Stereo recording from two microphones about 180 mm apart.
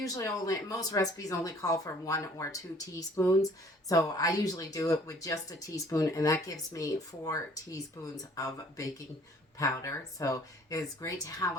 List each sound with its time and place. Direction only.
0.0 s speech: 20° left (ahead or behind)